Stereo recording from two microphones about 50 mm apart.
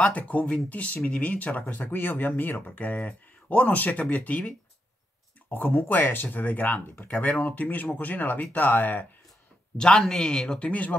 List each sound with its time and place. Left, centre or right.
0.0 s speech: left
1.9 s speech: left
5.5 s speech: left
9.8 s speech: centre
10.7 s speech: left